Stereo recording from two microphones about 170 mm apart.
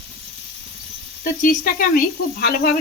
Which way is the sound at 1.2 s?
55° left (ahead or behind).